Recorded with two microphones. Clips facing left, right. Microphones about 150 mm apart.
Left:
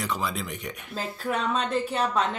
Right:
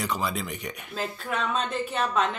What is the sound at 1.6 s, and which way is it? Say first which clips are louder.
Speech: left 2 dB; 35° left (ahead or behind).